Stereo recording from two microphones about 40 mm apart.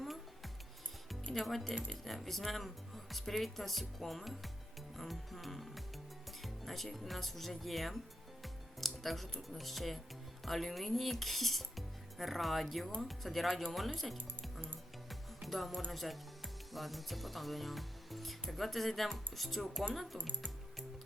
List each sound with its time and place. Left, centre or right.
0.0 s music: centre
1.3 s speech: centre
4.9 s music: centre
6.4 s speech: centre
8.4 s music: centre
9.5 s speech: centre
13.5 s speech: centre
13.7 s speech: centre
15.1 s music: centre
15.9 s speech: centre